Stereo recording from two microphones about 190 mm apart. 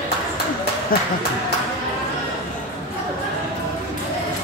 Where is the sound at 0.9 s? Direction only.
50° left (ahead or behind).